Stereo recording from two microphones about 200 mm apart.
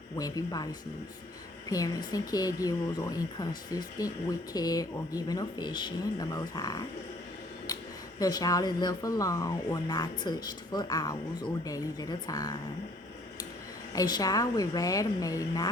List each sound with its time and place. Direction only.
0.2 s speech: 20° left (ahead or behind)
1.7 s speech: 20° left (ahead or behind)
8.2 s speech: 20° left (ahead or behind)
13.9 s speech: 20° left (ahead or behind)